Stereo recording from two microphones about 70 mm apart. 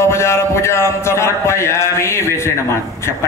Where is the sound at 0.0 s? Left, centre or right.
Left.